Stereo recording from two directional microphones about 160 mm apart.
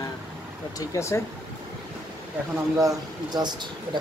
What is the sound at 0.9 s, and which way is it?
Speech, 15° left (ahead or behind).